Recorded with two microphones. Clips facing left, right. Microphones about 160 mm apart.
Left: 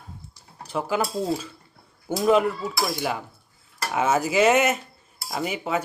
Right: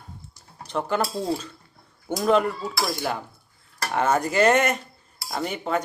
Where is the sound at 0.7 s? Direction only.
5° left (ahead or behind).